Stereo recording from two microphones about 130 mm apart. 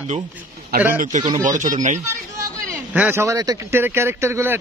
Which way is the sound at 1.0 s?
70° right (ahead or behind).